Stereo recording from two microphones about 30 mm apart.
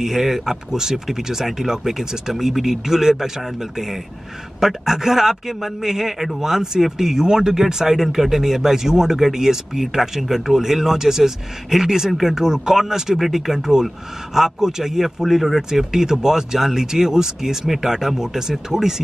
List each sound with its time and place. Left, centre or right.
0.0 s speech: centre
4.6 s speech: centre
7.6 s speech: centre